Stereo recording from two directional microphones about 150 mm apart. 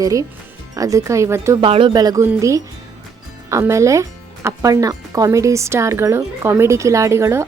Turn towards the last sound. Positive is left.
turn(degrees=-20)  # may be behind; listen again after turning